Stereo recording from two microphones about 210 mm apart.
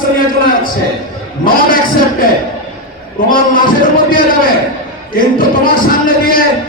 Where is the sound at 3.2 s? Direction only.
40° left (ahead or behind).